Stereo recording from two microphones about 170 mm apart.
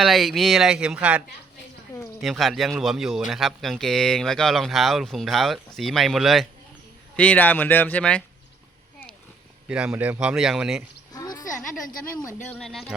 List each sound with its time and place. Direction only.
0.0 s speech: centre (ahead or behind)
2.2 s speech: centre (ahead or behind)
9.6 s speech: 5° right (ahead or behind)
11.1 s sheep: 20° left (ahead or behind)
12.5 s speech: 5° left (ahead or behind)